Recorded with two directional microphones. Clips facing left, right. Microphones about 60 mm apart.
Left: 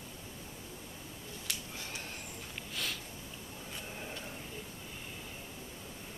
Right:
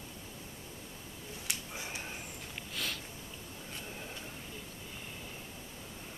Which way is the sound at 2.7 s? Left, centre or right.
Centre.